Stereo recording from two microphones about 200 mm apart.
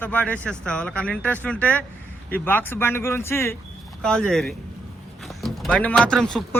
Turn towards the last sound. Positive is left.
turn(degrees=5)  # may be behind; listen again after turning